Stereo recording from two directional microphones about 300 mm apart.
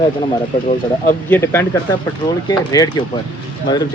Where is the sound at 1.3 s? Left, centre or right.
Centre.